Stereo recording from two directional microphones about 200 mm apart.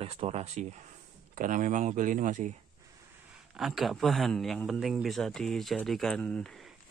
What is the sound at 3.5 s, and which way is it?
A man's voice, centre (ahead or behind).